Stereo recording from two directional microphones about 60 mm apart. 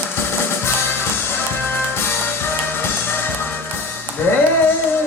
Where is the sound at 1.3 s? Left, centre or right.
Left.